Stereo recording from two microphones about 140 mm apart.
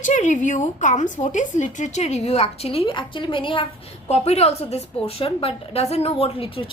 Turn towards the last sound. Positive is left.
turn(degrees=40)  # may be behind; listen again after turning